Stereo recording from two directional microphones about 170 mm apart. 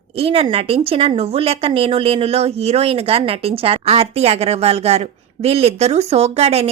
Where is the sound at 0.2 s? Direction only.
35° right (ahead or behind).